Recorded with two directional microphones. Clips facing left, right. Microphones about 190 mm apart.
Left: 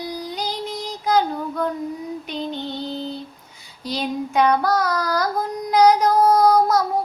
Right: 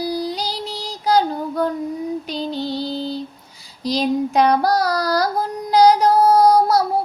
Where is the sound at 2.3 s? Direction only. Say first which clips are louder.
Right 3 dB; 35° right (ahead or behind).